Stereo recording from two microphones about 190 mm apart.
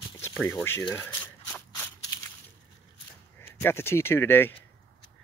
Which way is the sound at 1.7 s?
15° left (ahead or behind).